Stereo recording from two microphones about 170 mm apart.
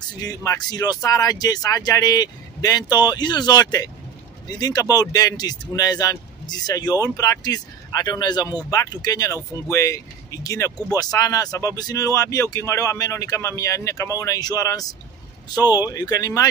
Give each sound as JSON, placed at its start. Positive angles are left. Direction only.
{"t": 0.2, "sound": "speech", "side_deg": 20}